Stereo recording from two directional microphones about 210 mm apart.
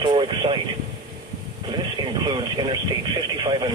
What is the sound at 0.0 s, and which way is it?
Vehicle, 20° right (ahead or behind).